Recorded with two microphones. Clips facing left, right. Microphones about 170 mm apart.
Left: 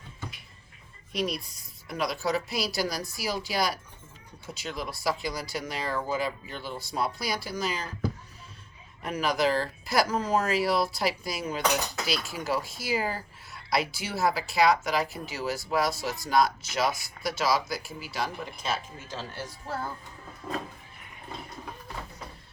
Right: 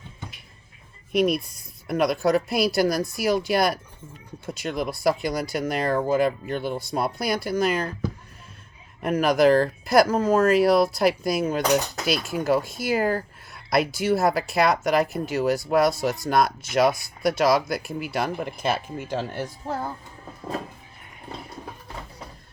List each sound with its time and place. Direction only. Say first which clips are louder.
1.1 s speech: right 9 dB; 55° right (ahead or behind)
9.0 s speech: right 8 dB; 50° right (ahead or behind)